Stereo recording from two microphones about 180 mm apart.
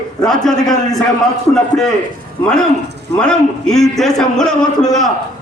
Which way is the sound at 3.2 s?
5° left (ahead or behind).